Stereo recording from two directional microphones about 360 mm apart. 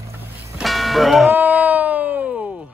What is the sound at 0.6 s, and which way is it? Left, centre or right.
Music, centre.